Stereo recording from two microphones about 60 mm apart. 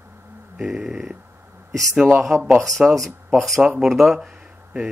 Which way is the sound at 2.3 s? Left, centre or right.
Centre.